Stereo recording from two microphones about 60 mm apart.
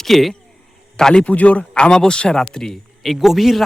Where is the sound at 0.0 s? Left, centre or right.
Centre.